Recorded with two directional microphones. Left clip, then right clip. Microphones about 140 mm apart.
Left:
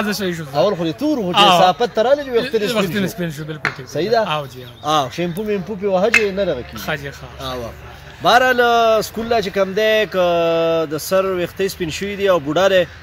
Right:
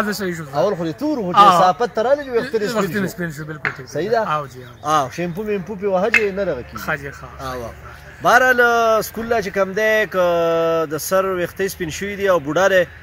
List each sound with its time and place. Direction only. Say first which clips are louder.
0.0 s speech: left 1 dB; 15° left (ahead or behind)
0.6 s speech: left 2 dB; 5° right (ahead or behind)
1.3 s speech: right 2 dB; 20° left (ahead or behind)
1.6 s speech: left 2 dB; 5° right (ahead or behind)
2.6 s speech: left 1 dB; 20° left (ahead or behind)
3.9 s speech: left 2 dB; 5° right (ahead or behind)
4.2 s speech: left 1 dB; 20° left (ahead or behind)
4.8 s speech: left 1 dB; 10° right (ahead or behind)
6.9 s speech: right 1 dB; 25° left (ahead or behind)
7.4 s speech: left 2 dB; 10° right (ahead or behind)